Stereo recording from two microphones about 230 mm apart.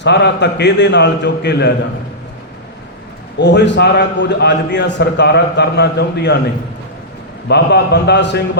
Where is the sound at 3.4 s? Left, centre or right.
Left.